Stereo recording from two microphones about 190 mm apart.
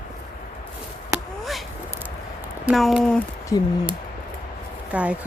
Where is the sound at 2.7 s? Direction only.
Centre (ahead or behind).